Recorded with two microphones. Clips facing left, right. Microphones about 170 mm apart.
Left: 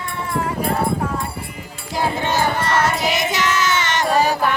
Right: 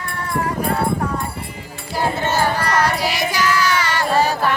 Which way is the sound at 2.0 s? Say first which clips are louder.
Even; 15° left (ahead or behind).